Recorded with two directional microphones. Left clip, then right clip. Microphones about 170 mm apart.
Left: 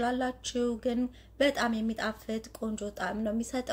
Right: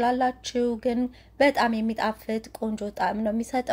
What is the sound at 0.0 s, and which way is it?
A woman's voice, 30° right (ahead or behind).